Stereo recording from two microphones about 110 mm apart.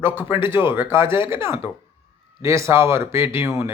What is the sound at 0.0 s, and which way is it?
Speech, 20° right (ahead or behind).